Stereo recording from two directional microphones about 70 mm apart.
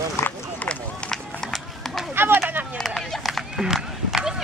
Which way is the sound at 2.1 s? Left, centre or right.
Right.